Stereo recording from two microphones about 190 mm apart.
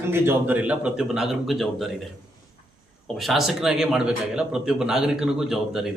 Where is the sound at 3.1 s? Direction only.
Centre (ahead or behind).